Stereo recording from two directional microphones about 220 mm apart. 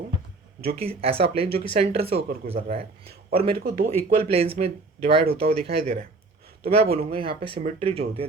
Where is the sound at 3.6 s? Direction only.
40° right (ahead or behind).